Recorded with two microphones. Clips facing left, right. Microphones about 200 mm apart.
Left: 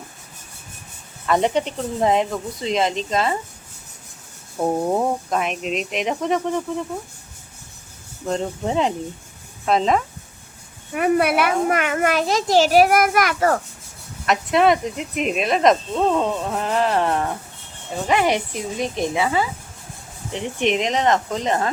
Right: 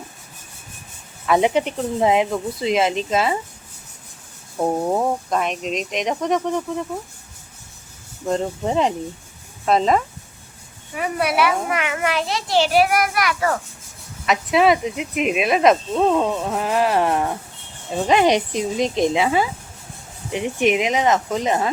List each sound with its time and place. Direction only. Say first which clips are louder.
1.3 s speech: right 2 dB; 5° right (ahead or behind)
4.5 s speech: even; centre (ahead or behind)
8.3 s speech: right 2 dB; centre (ahead or behind)
10.9 s a child's voice: left 4 dB; 55° left (ahead or behind)
14.3 s speech: even; centre (ahead or behind)